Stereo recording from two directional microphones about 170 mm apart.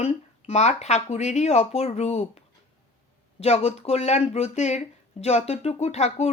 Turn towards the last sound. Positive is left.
turn(degrees=40)  # may be behind; listen again after turning